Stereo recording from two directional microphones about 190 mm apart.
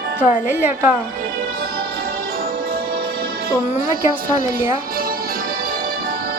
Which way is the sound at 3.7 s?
10° right (ahead or behind).